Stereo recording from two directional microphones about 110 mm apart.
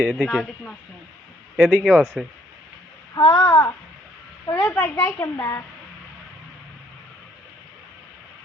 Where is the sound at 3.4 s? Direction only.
25° left (ahead or behind).